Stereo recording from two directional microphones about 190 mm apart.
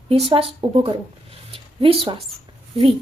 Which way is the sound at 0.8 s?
30° right (ahead or behind).